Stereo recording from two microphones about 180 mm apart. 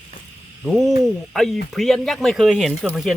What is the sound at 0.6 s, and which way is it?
Speech, centre (ahead or behind).